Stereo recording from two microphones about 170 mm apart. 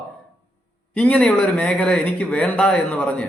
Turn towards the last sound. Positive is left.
turn(degrees=5)  # may be behind; listen again after turning